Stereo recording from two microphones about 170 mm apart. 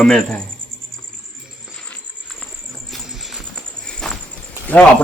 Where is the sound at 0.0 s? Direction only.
5° left (ahead or behind).